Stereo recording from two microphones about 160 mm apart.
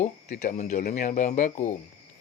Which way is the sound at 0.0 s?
50° left (ahead or behind).